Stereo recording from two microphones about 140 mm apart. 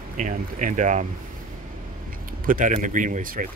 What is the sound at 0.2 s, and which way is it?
Speech, 70° right (ahead or behind).